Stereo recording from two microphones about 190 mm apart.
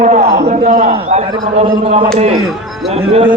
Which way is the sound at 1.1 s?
35° right (ahead or behind).